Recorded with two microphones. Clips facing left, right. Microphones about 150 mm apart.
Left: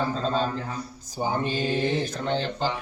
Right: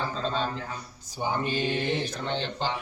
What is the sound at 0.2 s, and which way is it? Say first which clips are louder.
A man's voice: left 3 dB; 40° left (ahead or behind).